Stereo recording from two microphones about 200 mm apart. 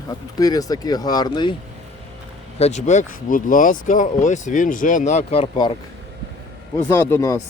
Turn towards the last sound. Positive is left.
turn(degrees=15)  # may be behind; listen again after turning